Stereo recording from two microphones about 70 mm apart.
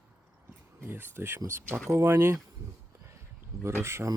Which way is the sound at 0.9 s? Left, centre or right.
Right.